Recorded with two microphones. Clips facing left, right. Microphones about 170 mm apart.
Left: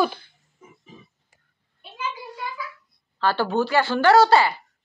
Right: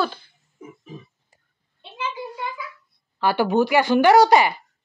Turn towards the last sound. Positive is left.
turn(degrees=-15)  # may be behind; listen again after turning